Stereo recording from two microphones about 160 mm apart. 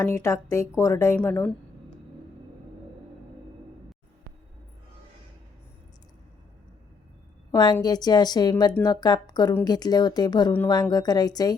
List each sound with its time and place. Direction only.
0.0 s speech: 15° left (ahead or behind)
7.5 s a woman's voice: 25° left (ahead or behind)